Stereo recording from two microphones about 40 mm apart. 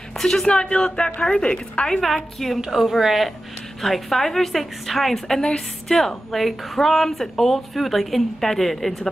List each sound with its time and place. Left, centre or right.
0.2 s a woman's voice: centre
0.6 s a sound: left
1.2 s a woman's voice: centre
2.0 s a woman's voice: centre